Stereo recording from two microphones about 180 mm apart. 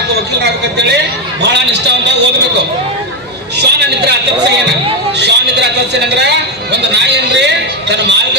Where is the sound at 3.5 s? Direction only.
70° right (ahead or behind).